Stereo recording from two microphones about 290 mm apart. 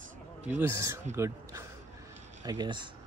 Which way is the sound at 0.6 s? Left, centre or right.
Centre.